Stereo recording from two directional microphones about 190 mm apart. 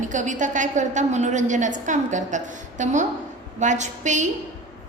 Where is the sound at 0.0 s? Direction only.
40° right (ahead or behind).